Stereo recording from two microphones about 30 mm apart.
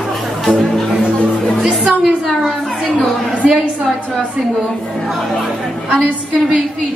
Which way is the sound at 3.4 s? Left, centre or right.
Centre.